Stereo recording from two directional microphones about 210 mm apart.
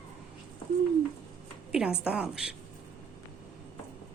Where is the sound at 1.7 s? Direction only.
5° right (ahead or behind).